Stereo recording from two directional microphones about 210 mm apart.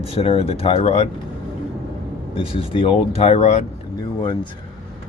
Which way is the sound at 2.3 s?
25° left (ahead or behind).